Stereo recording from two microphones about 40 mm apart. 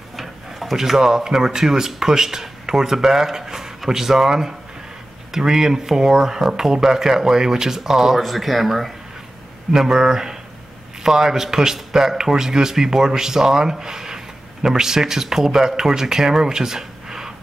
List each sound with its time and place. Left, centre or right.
0.1 s a man's voice: centre
9.7 s a man's voice: centre